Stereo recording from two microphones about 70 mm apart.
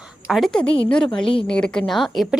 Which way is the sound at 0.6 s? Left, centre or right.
Centre.